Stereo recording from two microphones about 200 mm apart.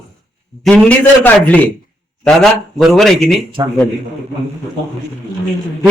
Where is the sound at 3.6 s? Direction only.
20° right (ahead or behind).